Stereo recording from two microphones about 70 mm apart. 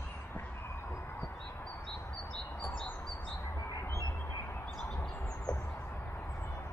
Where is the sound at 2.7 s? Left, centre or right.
Centre.